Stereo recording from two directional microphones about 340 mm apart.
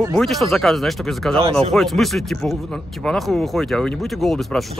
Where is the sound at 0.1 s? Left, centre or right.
Centre.